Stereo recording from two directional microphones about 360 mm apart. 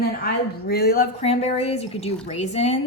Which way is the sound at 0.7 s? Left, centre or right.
Left.